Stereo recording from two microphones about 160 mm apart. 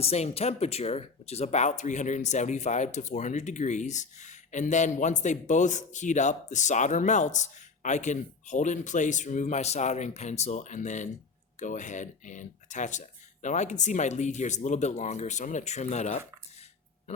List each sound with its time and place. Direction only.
0.0 s speech: 40° left (ahead or behind)